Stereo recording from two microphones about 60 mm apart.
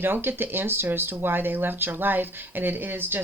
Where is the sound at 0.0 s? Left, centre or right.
Right.